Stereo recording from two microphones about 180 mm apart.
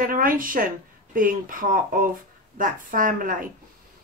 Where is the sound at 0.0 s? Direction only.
50° right (ahead or behind).